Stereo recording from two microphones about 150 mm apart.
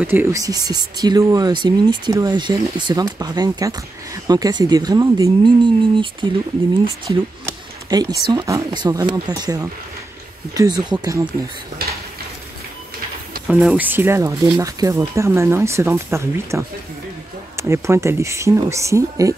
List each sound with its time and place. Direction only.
0.0 s speech: 15° right (ahead or behind); by 6.0 s 30° right (ahead or behind)
7.1 s speech: 25° right (ahead or behind)
13.5 s speech: 5° right (ahead or behind)